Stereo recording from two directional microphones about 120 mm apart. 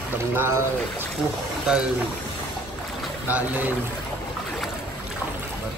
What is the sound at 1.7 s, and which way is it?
Speech, 5° right (ahead or behind).